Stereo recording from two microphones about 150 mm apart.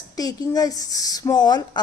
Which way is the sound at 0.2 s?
25° left (ahead or behind).